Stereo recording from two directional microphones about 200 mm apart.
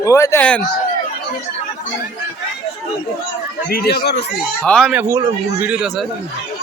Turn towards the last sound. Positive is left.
turn(degrees=0)  # may be behind; listen again after turning